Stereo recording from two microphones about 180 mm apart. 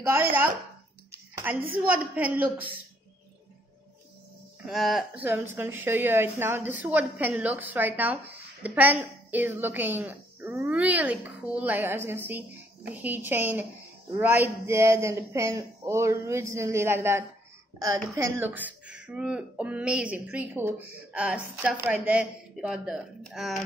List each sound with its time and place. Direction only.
0.0 s a woman's voice: 15° right (ahead or behind)
1.1 s a sound: 10° right (ahead or behind)
1.9 s a woman's voice: 10° right (ahead or behind)
4.6 s a woman's voice: centre (ahead or behind)